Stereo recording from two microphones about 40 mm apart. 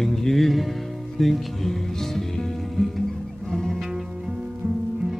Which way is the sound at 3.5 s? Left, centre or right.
Centre.